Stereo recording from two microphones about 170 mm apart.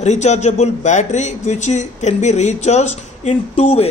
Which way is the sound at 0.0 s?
40° left (ahead or behind).